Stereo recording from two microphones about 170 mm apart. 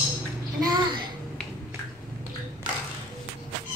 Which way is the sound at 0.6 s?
25° right (ahead or behind).